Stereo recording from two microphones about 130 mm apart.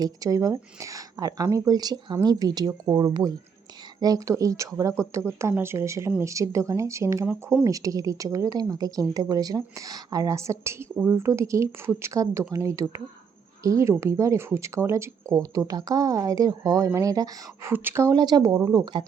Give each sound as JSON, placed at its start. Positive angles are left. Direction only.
{"t": 0.0, "sound": "speech", "side_deg": -25}